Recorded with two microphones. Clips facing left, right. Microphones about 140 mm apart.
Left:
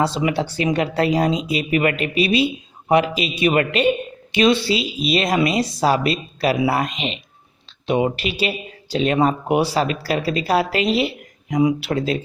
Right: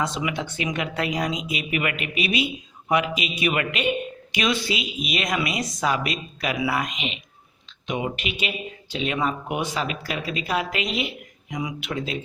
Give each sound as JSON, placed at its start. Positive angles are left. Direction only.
{"t": 0.0, "sound": "speech", "side_deg": 35}